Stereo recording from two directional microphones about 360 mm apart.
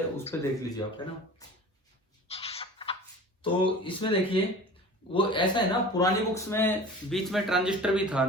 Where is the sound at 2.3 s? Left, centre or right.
Centre.